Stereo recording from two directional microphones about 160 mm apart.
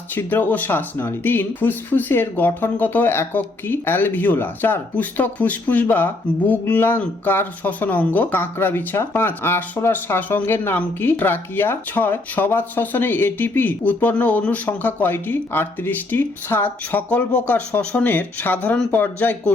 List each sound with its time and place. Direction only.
0.1 s speech: 10° left (ahead or behind)